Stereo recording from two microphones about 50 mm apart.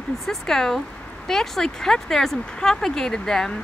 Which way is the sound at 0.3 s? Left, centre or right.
Centre.